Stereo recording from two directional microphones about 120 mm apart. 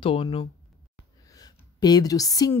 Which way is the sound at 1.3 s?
35° left (ahead or behind).